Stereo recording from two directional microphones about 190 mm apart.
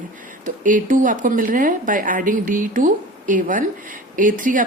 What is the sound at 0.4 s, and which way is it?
A woman's voice, 45° right (ahead or behind).